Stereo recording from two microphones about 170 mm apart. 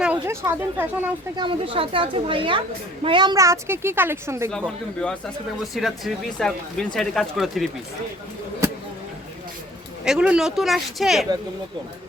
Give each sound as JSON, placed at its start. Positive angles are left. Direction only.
{"t": 0.0, "sound": "speech", "side_deg": -10}
{"t": 1.4, "sound": "speech", "side_deg": -30}
{"t": 4.5, "sound": "speech", "side_deg": 5}
{"t": 10.0, "sound": "speech", "side_deg": -5}